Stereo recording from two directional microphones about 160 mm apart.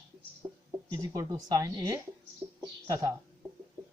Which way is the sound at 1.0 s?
25° right (ahead or behind).